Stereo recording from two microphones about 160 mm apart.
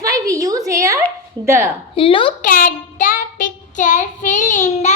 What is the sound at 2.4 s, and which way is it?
Child singing, 60° left (ahead or behind).